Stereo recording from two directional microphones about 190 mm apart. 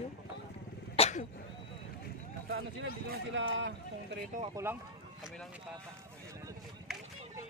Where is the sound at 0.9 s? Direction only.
35° left (ahead or behind).